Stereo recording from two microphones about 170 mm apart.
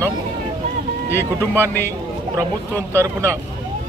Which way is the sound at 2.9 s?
15° right (ahead or behind).